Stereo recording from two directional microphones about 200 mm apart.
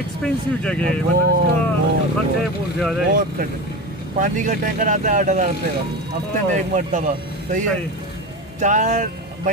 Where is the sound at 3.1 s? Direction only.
45° right (ahead or behind).